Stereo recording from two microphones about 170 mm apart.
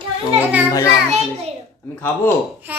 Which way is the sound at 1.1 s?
40° right (ahead or behind).